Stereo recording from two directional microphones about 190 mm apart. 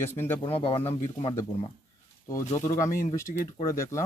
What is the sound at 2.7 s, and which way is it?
Speech, 15° left (ahead or behind).